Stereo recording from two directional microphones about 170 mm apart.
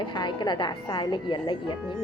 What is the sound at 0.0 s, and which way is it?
A woman's voice, 25° left (ahead or behind).